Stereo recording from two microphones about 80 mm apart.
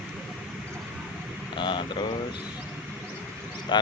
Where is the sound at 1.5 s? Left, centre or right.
Left.